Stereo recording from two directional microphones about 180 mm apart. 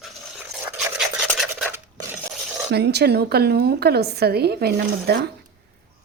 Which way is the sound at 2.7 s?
65° right (ahead or behind).